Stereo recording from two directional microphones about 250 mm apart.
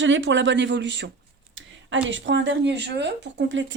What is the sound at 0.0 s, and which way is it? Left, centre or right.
Speech, right.